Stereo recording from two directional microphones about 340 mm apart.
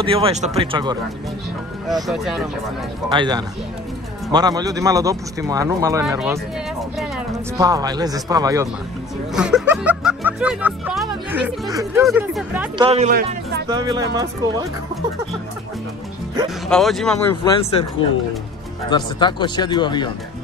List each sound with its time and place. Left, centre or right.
0.0 s speech: centre
2.0 s speech: centre
3.1 s speech: centre
7.5 s speech: centre
12.8 s speech: centre
13.7 s speech: centre
16.3 s speech: centre
17.4 s speech: centre
18.9 s speech: centre